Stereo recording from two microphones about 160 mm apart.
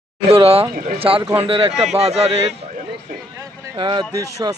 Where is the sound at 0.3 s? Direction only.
35° right (ahead or behind).